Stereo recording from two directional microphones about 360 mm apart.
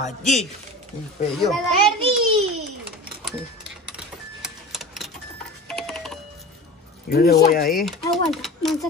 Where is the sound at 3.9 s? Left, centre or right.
Centre.